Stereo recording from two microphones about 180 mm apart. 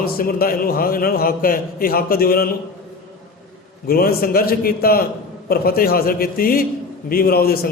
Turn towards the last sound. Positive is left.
turn(degrees=55)  # may be behind; listen again after turning